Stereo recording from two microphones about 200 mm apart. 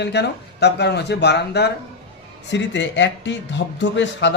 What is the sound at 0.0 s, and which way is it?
Speech, 55° left (ahead or behind).